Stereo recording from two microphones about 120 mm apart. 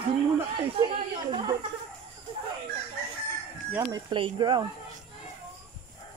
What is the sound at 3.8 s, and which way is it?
Speech, 30° right (ahead or behind).